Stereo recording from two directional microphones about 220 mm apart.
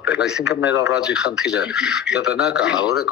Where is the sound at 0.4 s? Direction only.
50° left (ahead or behind).